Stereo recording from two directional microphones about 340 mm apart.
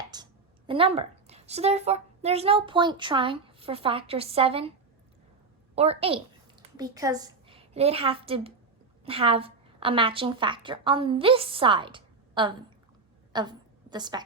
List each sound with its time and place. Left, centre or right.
0.1 s a sound: centre
0.7 s a woman's voice: centre
5.7 s a woman's voice: centre